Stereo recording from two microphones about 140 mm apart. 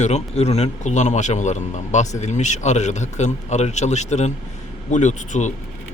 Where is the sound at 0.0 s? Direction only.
50° left (ahead or behind).